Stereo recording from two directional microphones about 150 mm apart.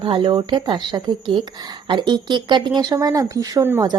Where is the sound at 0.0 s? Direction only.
35° right (ahead or behind).